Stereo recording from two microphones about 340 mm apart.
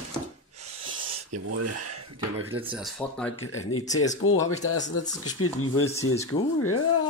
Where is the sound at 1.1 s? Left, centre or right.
Right.